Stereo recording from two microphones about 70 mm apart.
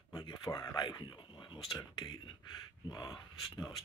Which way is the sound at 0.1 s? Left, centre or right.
Left.